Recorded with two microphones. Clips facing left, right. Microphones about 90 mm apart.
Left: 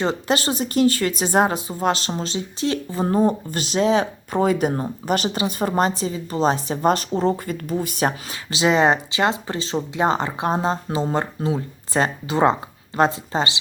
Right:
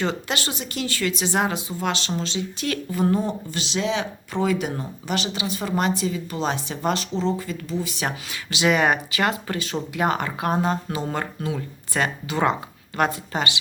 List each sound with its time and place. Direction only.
0.0 s speech: 35° left (ahead or behind)